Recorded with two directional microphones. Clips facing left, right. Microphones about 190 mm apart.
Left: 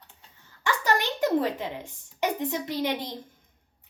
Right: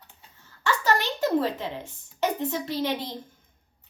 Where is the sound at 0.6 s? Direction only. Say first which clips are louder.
Right 1 dB; 15° left (ahead or behind).